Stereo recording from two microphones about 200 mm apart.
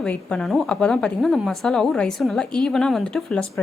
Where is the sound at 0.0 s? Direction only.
5° left (ahead or behind).